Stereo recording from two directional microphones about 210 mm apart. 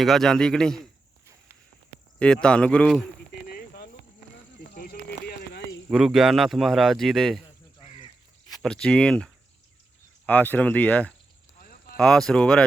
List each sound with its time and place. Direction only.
0.0 s speech: centre (ahead or behind)
2.1 s speech: 5° left (ahead or behind)
4.7 s a sound: 45° left (ahead or behind)
5.9 s speech: centre (ahead or behind)
7.8 s caw: 25° left (ahead or behind)
8.5 s speech: 5° left (ahead or behind)
11.6 s a sound: 45° left (ahead or behind)
11.9 s speech: 5° left (ahead or behind)